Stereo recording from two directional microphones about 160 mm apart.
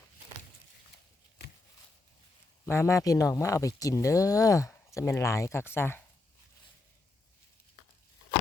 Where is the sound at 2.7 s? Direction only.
15° left (ahead or behind).